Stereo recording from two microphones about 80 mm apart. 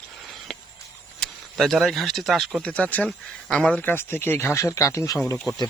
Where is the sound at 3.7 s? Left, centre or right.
Centre.